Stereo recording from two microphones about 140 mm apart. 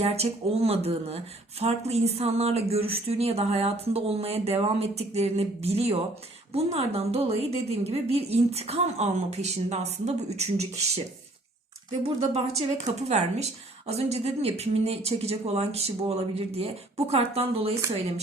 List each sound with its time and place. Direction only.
0.0 s speech: 45° right (ahead or behind)
12.0 s speech: 45° right (ahead or behind)